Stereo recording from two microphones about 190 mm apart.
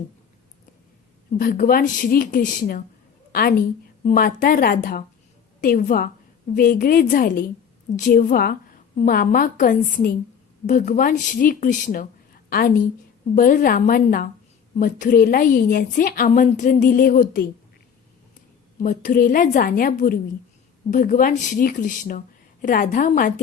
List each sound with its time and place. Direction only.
1.4 s a woman's voice: 50° left (ahead or behind)
4.0 s a woman's voice: 45° left (ahead or behind)
18.8 s a woman's voice: 45° left (ahead or behind)